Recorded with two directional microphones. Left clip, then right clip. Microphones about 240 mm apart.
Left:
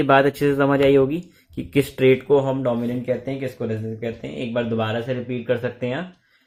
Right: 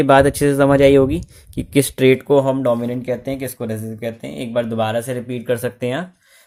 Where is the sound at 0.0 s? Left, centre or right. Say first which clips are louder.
Right 4 dB; right.